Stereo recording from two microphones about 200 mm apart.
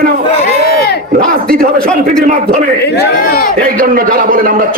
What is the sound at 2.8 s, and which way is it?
Speech, 50° left (ahead or behind).